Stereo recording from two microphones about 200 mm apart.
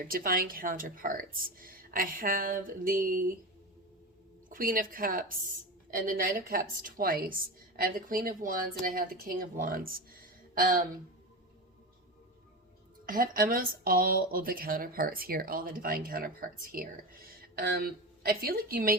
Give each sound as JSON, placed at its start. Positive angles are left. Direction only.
{"t": 0.0, "sound": "speech", "side_deg": -45}
{"t": 4.4, "sound": "a woman's voice", "side_deg": -45}
{"t": 13.1, "sound": "speech", "side_deg": -45}